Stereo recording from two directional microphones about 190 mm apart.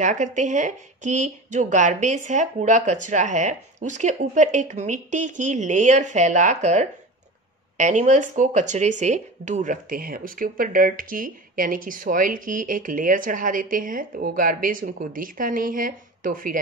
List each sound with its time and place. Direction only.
0.0 s speech: 40° right (ahead or behind)